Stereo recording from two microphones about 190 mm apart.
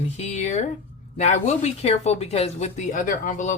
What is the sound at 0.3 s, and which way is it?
Speech, 35° left (ahead or behind).